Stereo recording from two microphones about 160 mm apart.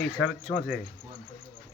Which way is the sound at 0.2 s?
5° left (ahead or behind).